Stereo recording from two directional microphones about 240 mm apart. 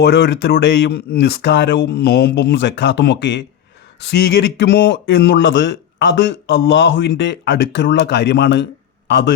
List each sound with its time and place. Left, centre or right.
0.0 s a man's voice: left